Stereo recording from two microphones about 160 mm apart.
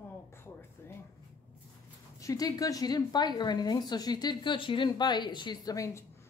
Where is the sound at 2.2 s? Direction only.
20° left (ahead or behind).